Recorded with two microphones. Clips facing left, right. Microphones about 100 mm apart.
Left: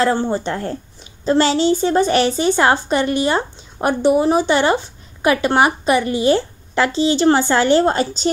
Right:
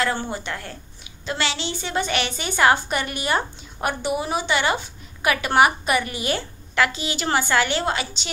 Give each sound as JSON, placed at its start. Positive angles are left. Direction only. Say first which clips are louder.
{"t": 0.0, "sound": "a woman's voice", "louder": "left 8 dB", "side_deg": 30}